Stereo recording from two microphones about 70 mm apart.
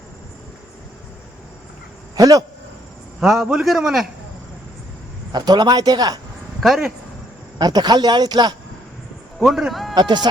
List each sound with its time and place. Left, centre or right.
2.1 s speech: right
3.2 s a man's voice: centre
5.3 s speech: right
6.6 s a man's voice: centre
7.6 s speech: right
9.4 s a man's voice: centre
9.9 s speech: right